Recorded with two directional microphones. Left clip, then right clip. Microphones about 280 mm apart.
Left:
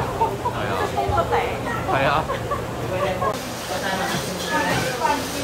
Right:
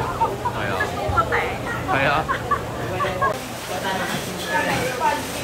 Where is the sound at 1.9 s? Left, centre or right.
Centre.